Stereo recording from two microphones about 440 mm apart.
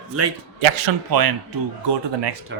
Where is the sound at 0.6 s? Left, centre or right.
Right.